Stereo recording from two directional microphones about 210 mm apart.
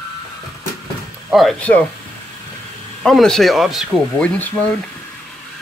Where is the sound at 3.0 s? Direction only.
Centre (ahead or behind).